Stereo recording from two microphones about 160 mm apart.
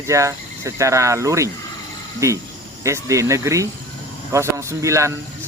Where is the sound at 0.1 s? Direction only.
20° right (ahead or behind).